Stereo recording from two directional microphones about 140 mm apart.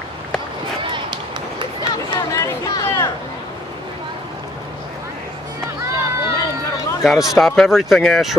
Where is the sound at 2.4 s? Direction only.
20° left (ahead or behind).